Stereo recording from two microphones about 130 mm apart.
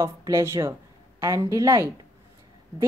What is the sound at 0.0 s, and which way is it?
Speech, 25° right (ahead or behind).